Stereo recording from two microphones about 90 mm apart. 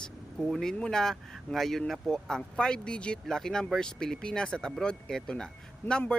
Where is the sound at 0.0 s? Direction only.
5° left (ahead or behind).